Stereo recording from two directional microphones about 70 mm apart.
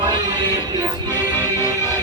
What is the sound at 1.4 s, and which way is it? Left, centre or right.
Music, left.